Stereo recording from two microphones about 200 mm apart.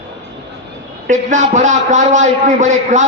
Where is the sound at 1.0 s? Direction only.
40° right (ahead or behind).